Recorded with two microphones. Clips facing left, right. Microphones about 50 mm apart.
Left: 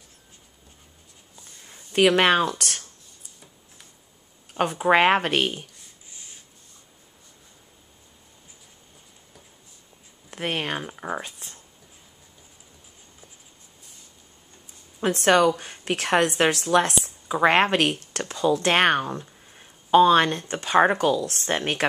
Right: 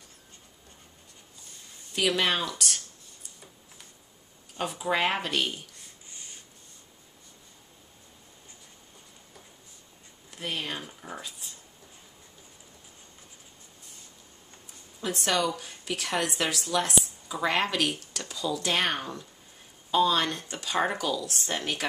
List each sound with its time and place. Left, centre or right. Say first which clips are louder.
1.9 s speech: left 8 dB; left
4.6 s a woman's voice: left 9 dB; left
6.1 s rub: even; centre
10.3 s a woman's voice: left 6 dB; left
15.0 s a woman's voice: left 9 dB; left